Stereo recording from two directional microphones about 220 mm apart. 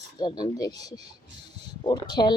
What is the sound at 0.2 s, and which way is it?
Speech, 20° left (ahead or behind).